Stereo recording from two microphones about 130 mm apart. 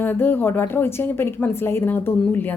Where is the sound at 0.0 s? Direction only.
15° left (ahead or behind).